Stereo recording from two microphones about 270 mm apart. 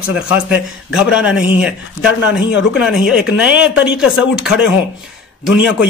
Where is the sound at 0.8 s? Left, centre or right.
Centre.